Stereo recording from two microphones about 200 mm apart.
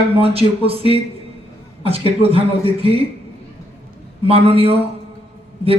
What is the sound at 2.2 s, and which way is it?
Speech, 30° right (ahead or behind).